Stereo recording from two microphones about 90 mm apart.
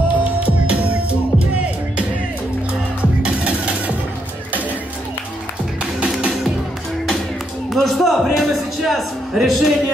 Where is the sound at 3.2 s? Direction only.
15° right (ahead or behind).